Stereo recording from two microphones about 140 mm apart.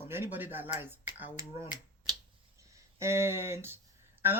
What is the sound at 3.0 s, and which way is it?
Speech, 20° right (ahead or behind).